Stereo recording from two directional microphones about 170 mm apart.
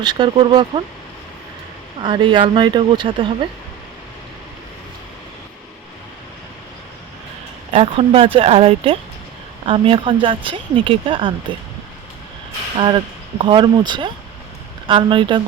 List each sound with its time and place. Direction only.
0.0 s speech: 25° right (ahead or behind)
2.0 s speech: 30° right (ahead or behind)
7.7 s speech: 35° right (ahead or behind)
12.7 s speech: 30° right (ahead or behind)